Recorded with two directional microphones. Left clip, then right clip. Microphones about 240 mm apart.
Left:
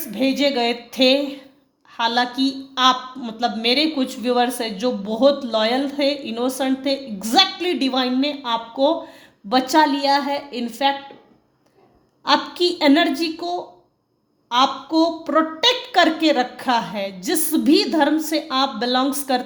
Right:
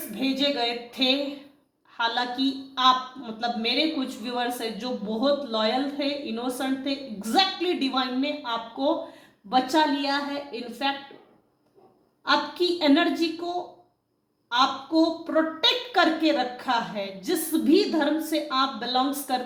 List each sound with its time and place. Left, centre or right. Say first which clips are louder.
0.1 s a man's voice: left 6 dB; left
12.2 s a man's voice: left 5 dB; left
15.0 s a man's voice: left 7 dB; left